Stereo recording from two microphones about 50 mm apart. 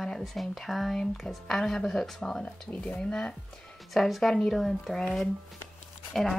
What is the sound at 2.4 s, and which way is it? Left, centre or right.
Speech, left.